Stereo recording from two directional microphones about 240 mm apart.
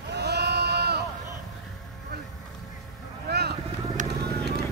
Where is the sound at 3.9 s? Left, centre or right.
Right.